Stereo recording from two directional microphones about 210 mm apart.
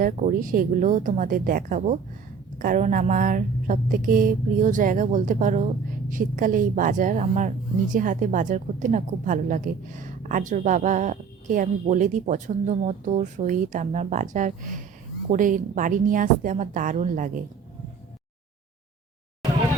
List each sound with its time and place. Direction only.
0.0 s a woman's voice: 40° right (ahead or behind)